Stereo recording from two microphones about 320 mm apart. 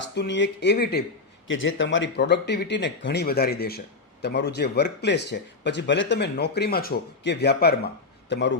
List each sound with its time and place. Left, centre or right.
0.0 s speech: left